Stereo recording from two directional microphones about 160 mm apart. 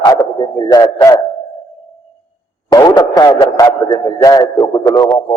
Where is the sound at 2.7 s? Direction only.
25° left (ahead or behind).